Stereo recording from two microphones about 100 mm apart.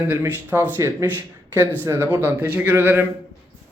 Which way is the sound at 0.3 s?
20° right (ahead or behind).